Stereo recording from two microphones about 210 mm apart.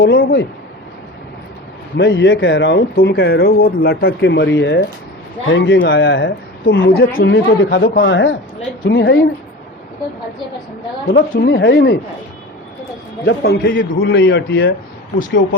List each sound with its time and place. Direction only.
0.0 s speech: 60° left (ahead or behind)
2.0 s speech: 60° left (ahead or behind)
6.8 s speech: 45° left (ahead or behind)
11.1 s speech: 60° left (ahead or behind)
13.2 s speech: 50° left (ahead or behind)